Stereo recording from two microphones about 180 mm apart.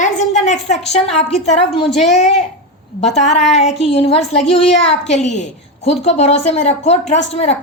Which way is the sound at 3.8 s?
35° left (ahead or behind).